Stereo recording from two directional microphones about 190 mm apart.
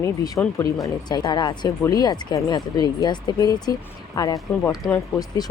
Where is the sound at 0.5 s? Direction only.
20° left (ahead or behind).